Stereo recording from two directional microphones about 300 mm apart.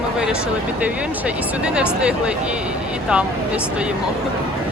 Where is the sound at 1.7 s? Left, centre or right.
Centre.